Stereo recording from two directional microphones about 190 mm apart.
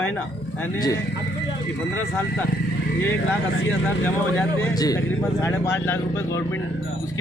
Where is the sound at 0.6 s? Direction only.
15° left (ahead or behind).